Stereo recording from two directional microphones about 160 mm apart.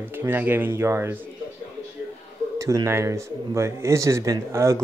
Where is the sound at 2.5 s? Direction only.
20° right (ahead or behind).